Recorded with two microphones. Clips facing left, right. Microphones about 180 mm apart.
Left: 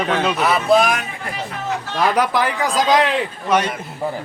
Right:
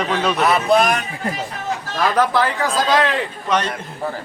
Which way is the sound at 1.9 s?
15° left (ahead or behind).